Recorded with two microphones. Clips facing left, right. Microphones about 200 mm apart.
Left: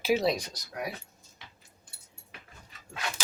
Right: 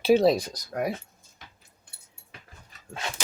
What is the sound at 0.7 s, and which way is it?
Speech, 50° right (ahead or behind).